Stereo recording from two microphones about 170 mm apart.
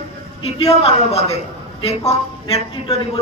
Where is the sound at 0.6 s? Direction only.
35° left (ahead or behind).